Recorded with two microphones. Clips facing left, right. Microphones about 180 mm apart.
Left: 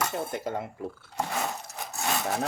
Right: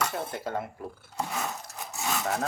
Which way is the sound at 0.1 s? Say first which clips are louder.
Left 1 dB; 20° left (ahead or behind).